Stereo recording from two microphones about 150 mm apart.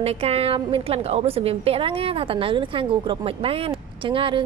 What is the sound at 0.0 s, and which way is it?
A woman's voice, 40° right (ahead or behind).